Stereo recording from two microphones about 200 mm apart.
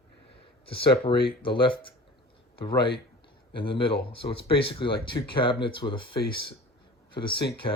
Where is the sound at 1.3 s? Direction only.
25° left (ahead or behind).